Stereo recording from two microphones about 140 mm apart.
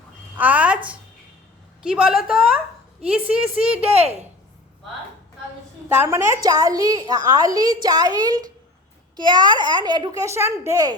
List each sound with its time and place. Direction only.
0.3 s a sound: 10° right (ahead or behind)
1.8 s a woman's voice: 5° right (ahead or behind)
3.8 s speech: 45° right (ahead or behind)
6.0 s a woman's voice: 20° right (ahead or behind)